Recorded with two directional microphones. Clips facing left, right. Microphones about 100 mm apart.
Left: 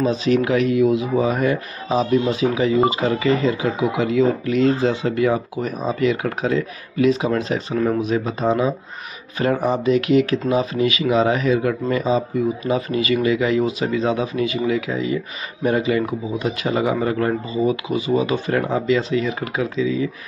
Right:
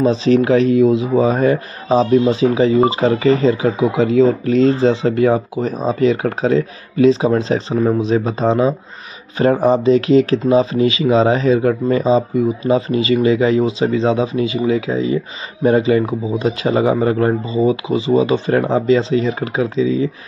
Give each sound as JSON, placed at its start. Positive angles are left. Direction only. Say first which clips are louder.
{"t": 0.0, "sound": "a man's voice", "louder": "right 5 dB", "side_deg": -35}